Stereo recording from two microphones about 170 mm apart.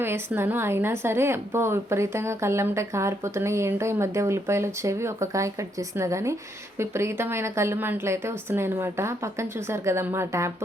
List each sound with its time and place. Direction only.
0.0 s a woman's voice: 15° right (ahead or behind)